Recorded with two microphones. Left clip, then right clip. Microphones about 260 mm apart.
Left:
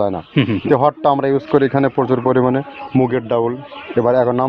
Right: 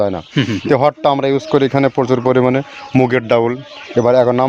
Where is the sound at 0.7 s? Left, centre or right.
Right.